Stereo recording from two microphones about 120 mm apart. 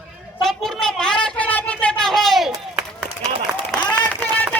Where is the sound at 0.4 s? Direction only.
Centre (ahead or behind).